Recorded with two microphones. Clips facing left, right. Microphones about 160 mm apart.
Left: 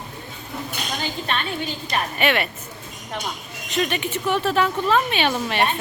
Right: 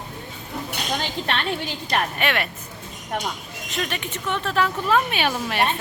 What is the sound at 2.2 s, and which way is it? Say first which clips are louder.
Speech: left 3 dB; centre (ahead or behind).